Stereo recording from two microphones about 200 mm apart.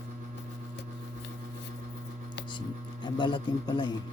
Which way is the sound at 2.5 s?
25° left (ahead or behind).